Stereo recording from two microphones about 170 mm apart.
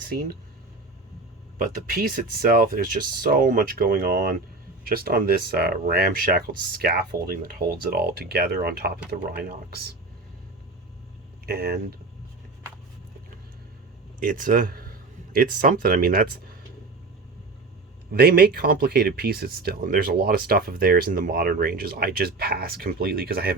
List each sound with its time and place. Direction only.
0.0 s speech: 60° right (ahead or behind)
1.9 s speech: 60° right (ahead or behind)
11.4 s speech: 65° right (ahead or behind)
14.2 s a sound: 55° right (ahead or behind)
15.5 s speech: 55° right (ahead or behind)
18.1 s speech: 70° right (ahead or behind)